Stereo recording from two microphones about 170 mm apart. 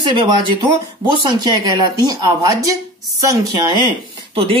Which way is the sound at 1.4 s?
25° right (ahead or behind).